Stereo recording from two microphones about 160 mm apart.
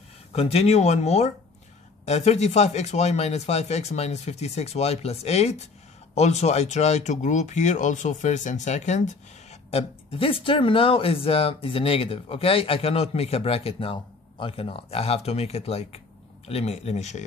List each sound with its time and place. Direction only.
0.3 s speech: 40° left (ahead or behind)